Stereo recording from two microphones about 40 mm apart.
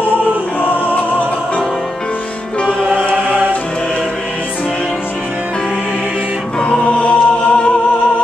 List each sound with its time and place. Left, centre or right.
0.6 s music: left
6.6 s choir: left